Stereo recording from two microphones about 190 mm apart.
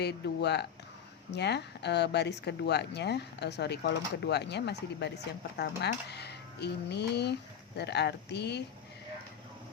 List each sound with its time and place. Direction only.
0.0 s speech: 60° left (ahead or behind)